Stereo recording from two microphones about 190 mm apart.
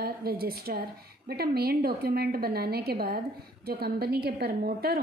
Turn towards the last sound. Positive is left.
turn(degrees=-50)  # may be behind; listen again after turning